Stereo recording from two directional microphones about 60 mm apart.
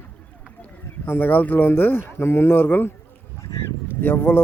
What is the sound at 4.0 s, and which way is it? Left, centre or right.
Speech, left.